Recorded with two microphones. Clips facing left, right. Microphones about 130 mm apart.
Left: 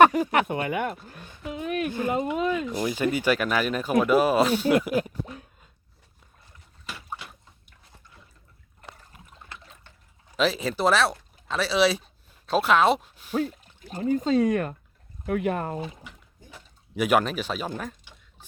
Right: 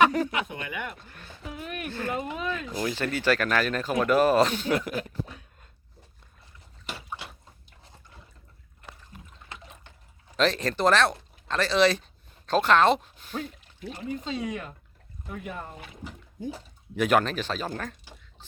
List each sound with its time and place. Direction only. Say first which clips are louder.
0.3 s speech: left 8 dB; 60° left (ahead or behind)
0.6 s speech: left 8 dB; 45° left (ahead or behind)
1.1 s a woman's voice: left 5 dB; 15° left (ahead or behind)
6.8 s a sound: even; 30° right (ahead or behind)
9.5 s water: right 2 dB; 20° right (ahead or behind)
10.3 s speech: even; 5° left (ahead or behind)
13.9 s speech: left 10 dB; 40° left (ahead or behind)
15.3 s speech: left 11 dB; 75° left (ahead or behind)
16.9 s speech: left 1 dB; 10° left (ahead or behind)